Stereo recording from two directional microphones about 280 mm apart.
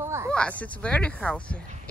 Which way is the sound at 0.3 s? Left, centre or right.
Centre.